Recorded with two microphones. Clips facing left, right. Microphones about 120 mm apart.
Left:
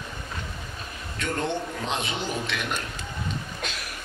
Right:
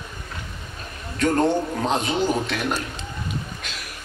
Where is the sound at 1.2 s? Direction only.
40° right (ahead or behind).